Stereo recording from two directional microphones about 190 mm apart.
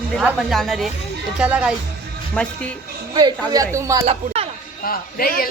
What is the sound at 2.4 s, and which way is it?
Speech, 10° left (ahead or behind).